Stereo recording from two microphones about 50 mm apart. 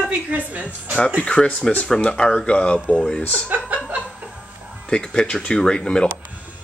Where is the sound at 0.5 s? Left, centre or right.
Right.